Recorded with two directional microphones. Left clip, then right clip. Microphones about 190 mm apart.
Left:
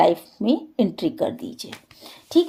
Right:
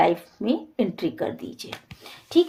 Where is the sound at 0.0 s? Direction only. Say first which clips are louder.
Left 3 dB; 45° left (ahead or behind).